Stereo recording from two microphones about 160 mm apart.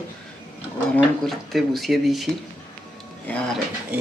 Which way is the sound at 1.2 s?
Centre (ahead or behind).